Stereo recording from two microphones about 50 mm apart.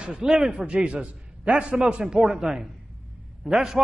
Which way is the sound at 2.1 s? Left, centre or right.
Centre.